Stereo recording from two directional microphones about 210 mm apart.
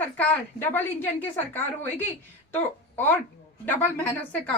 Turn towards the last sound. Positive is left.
turn(degrees=5)  # may be behind; listen again after turning